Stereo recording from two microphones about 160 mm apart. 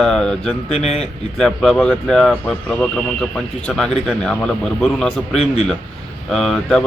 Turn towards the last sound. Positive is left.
turn(degrees=5)  # may be behind; listen again after turning